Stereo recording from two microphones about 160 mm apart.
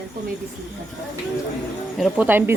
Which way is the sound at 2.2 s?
10° right (ahead or behind).